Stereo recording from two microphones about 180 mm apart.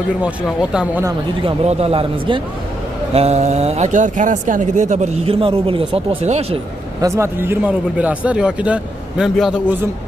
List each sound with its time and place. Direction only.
0.2 s speech: 5° right (ahead or behind)
1.4 s a man's voice: 35° right (ahead or behind)
7.0 s a man's voice: 15° right (ahead or behind)